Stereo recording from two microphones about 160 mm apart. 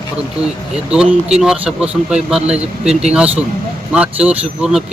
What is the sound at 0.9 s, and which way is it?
Speech, 5° right (ahead or behind).